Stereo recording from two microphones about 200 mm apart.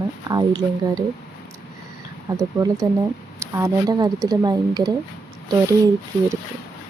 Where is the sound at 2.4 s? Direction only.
15° right (ahead or behind).